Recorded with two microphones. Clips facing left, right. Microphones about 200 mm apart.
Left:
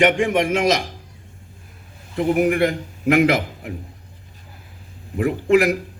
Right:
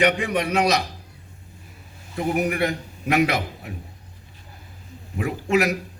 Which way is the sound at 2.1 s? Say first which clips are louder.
Left 5 dB; 55° left (ahead or behind).